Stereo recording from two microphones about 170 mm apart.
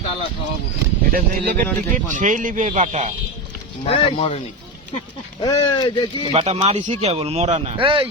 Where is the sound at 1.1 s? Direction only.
55° right (ahead or behind).